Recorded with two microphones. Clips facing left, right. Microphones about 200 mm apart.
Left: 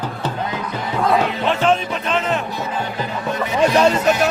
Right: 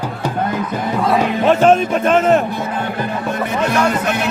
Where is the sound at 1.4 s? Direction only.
45° right (ahead or behind).